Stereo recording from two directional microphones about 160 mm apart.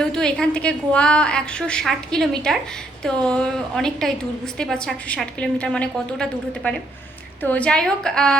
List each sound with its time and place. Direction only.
0.0 s a woman's voice: 5° left (ahead or behind)